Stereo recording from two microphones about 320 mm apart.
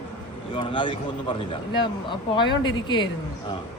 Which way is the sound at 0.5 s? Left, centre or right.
Centre.